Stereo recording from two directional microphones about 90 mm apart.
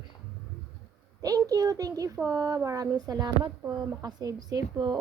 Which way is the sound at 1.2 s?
45° right (ahead or behind).